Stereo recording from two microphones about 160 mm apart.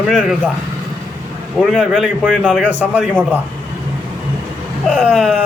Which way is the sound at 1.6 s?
Centre (ahead or behind).